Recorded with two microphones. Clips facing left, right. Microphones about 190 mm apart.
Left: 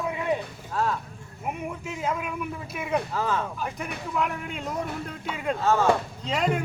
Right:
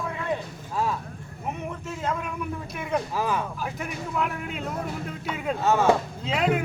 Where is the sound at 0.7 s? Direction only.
10° right (ahead or behind).